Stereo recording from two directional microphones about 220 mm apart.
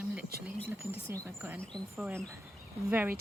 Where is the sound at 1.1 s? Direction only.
10° right (ahead or behind).